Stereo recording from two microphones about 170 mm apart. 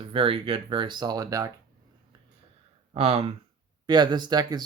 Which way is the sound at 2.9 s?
35° right (ahead or behind).